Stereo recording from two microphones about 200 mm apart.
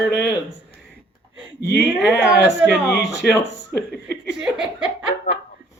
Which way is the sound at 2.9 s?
55° left (ahead or behind).